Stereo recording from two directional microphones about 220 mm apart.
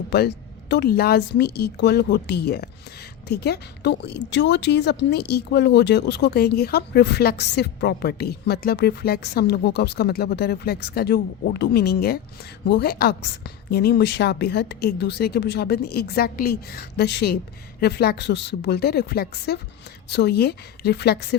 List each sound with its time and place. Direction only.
0.1 s a woman's voice: 50° left (ahead or behind)